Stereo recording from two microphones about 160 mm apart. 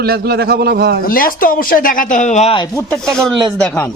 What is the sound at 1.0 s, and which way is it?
Speech, 65° left (ahead or behind).